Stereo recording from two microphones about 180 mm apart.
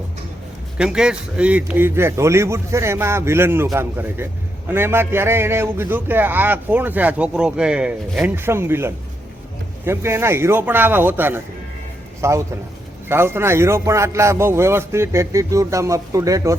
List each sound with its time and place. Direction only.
0.8 s a man's voice: 5° right (ahead or behind)